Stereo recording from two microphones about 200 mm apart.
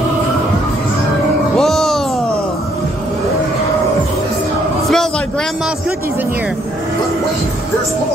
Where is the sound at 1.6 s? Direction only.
Centre (ahead or behind).